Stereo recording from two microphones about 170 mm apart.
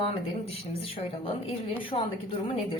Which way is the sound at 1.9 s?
30° left (ahead or behind).